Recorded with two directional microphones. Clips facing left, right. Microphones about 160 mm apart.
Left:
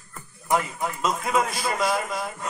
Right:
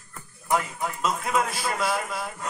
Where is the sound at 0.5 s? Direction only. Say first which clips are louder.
Left 1 dB; 5° left (ahead or behind).